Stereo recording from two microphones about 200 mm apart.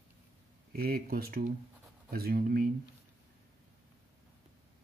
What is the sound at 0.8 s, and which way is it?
Speech, 50° right (ahead or behind).